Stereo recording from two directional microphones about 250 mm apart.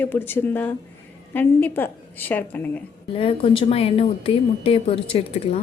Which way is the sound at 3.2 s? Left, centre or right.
Left.